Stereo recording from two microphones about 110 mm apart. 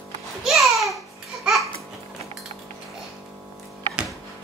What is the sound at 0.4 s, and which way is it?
Babbling, centre (ahead or behind).